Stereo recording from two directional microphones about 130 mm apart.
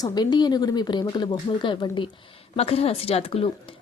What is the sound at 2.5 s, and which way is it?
Speech, 50° left (ahead or behind).